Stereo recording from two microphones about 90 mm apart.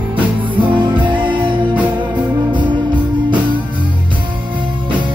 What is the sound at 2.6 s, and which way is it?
Music, 60° right (ahead or behind).